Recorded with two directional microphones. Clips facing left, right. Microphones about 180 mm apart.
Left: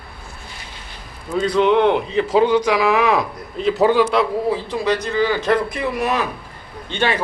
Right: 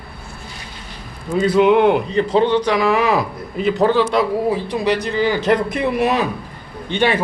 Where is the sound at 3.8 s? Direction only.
10° left (ahead or behind).